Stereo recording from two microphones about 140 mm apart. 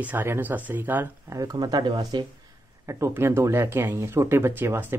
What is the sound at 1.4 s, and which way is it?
Speech, 30° right (ahead or behind).